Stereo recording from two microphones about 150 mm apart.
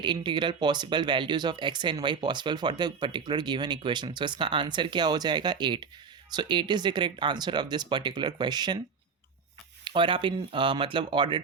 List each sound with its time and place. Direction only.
0.0 s speech: 30° right (ahead or behind)
9.8 s speech: 35° right (ahead or behind)